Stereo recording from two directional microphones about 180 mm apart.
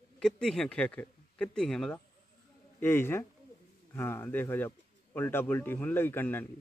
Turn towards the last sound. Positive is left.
turn(degrees=10)  # may be behind; listen again after turning